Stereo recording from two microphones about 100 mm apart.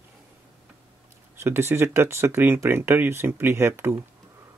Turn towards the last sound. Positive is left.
turn(degrees=-25)  # may be behind; listen again after turning